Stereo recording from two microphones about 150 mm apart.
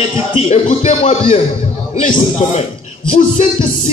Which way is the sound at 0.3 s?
45° left (ahead or behind).